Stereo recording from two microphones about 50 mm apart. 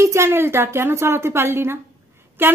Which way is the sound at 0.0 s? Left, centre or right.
Right.